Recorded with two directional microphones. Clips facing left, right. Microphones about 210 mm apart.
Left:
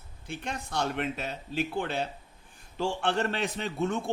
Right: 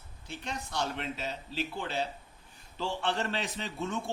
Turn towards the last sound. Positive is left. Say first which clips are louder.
# left 6 dB
turn(degrees=60)  # may be behind; listen again after turning